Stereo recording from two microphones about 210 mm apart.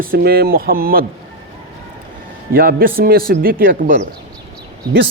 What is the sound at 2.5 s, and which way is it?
Speech, 45° right (ahead or behind).